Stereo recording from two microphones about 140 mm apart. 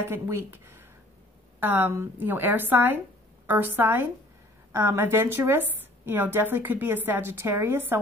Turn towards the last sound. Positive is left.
turn(degrees=-15)  # may be behind; listen again after turning